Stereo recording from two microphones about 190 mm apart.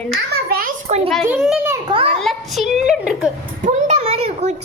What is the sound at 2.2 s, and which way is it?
A child's voice, centre (ahead or behind).